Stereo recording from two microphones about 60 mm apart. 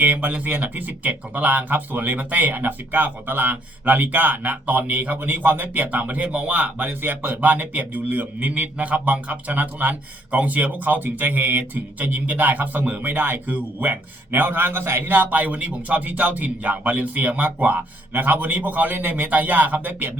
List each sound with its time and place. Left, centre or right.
0.0 s speech: right